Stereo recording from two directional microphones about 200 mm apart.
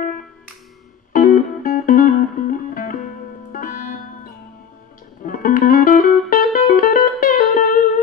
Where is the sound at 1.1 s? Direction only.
45° left (ahead or behind).